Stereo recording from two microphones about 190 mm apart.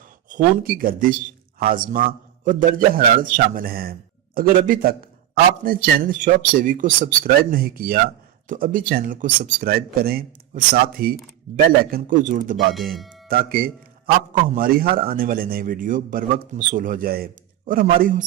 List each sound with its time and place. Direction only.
0.3 s speech: 40° right (ahead or behind)